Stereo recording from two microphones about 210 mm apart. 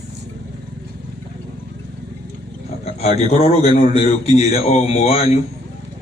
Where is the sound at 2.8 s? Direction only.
30° left (ahead or behind).